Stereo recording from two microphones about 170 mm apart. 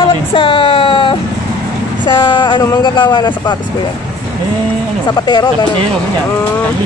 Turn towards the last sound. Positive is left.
turn(degrees=25)  # may be behind; listen again after turning